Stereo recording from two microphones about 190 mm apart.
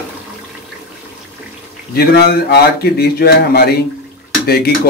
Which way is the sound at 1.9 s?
55° left (ahead or behind).